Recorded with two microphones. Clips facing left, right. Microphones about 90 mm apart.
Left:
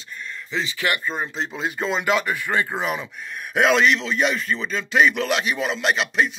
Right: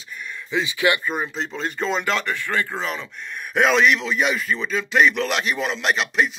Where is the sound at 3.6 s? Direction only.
Centre (ahead or behind).